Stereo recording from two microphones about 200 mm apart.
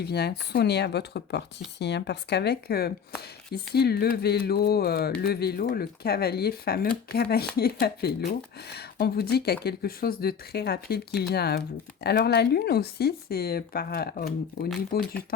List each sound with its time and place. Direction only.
0.0 s speech: 55° left (ahead or behind)